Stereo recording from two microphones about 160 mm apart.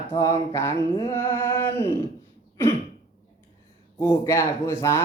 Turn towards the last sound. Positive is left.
turn(degrees=15)  # may be behind; listen again after turning